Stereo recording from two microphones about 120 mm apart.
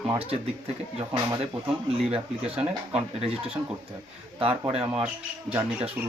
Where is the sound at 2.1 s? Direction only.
55° right (ahead or behind).